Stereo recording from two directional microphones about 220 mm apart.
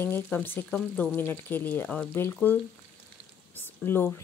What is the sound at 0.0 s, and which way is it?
A woman's voice, 10° left (ahead or behind).